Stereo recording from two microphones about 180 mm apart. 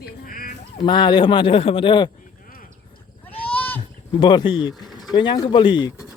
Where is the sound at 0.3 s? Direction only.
50° left (ahead or behind).